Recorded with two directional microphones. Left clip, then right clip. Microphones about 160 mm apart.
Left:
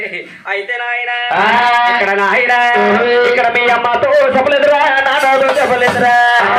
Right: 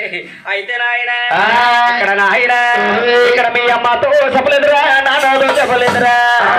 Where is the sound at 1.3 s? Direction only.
35° right (ahead or behind).